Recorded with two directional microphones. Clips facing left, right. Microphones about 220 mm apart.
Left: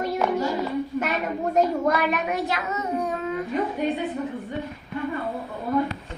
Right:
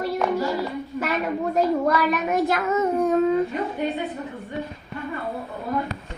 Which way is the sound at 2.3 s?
50° right (ahead or behind).